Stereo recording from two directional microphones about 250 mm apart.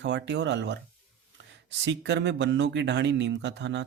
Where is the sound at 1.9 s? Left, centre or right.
Right.